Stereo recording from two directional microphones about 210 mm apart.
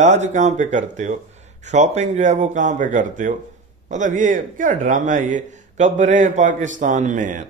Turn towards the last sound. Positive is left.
turn(degrees=-35)  # may be behind; listen again after turning